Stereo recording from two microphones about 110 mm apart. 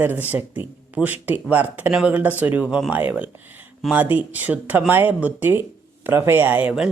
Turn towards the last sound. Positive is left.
turn(degrees=-15)  # may be behind; listen again after turning